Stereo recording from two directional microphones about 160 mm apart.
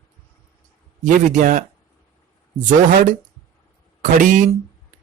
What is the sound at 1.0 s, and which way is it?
Speech, 50° right (ahead or behind).